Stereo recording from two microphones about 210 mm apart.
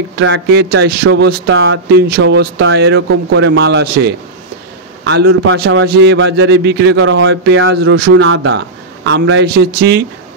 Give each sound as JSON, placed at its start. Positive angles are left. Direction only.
{"t": 0.2, "sound": "a man's voice", "side_deg": -55}
{"t": 7.7, "sound": "speech", "side_deg": -50}
{"t": 8.1, "sound": "speech", "side_deg": -65}